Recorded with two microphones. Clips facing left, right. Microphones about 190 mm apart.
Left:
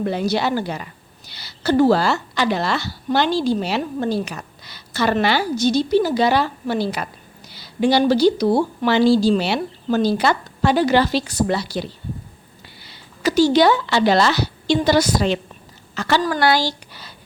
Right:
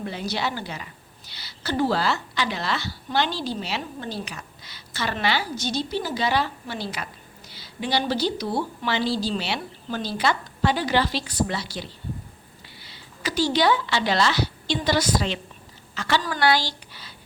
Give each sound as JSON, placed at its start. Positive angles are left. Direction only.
{"t": 0.0, "sound": "a woman's voice", "side_deg": 55}
{"t": 0.3, "sound": "a woman's voice", "side_deg": 45}
{"t": 13.2, "sound": "a woman's voice", "side_deg": 45}